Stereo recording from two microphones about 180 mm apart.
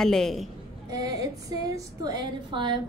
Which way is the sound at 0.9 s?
20° right (ahead or behind).